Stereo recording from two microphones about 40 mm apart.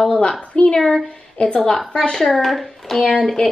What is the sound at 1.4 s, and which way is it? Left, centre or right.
Speech, left.